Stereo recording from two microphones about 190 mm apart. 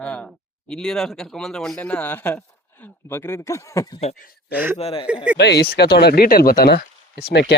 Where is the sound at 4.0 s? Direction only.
35° left (ahead or behind).